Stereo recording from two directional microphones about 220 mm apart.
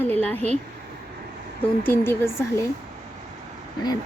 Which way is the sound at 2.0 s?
10° left (ahead or behind).